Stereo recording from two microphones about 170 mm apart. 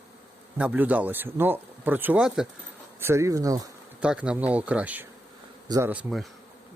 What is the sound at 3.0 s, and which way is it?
Speech, 15° right (ahead or behind).